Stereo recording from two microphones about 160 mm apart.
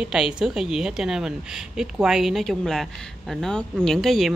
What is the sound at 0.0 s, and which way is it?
A woman's voice, 5° right (ahead or behind).